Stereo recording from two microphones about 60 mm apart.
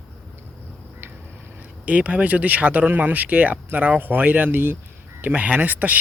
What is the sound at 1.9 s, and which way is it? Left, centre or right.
A man's voice, right.